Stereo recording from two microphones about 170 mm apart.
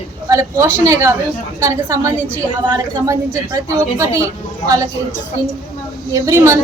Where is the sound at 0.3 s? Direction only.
20° right (ahead or behind).